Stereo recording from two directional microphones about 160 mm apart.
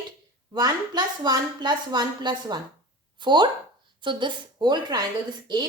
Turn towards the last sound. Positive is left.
turn(degrees=-25)  # may be behind; listen again after turning